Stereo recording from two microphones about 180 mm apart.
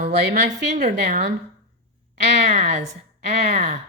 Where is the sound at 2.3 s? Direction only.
40° right (ahead or behind).